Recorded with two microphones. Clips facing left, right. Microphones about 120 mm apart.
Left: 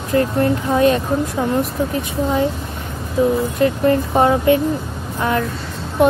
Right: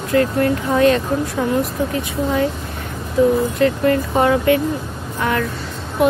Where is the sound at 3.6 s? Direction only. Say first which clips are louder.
Left 2 dB; 25° left (ahead or behind).